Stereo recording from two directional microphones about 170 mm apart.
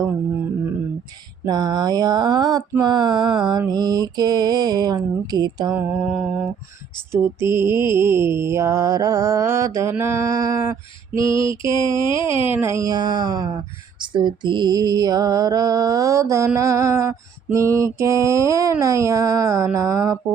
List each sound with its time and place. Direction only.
1.5 s music: 25° right (ahead or behind)
5.7 s mantra: 10° right (ahead or behind)
7.1 s mantra: 15° right (ahead or behind)
11.3 s mantra: 30° left (ahead or behind)
12.5 s music: 15° right (ahead or behind)
16.6 s mantra: 20° right (ahead or behind)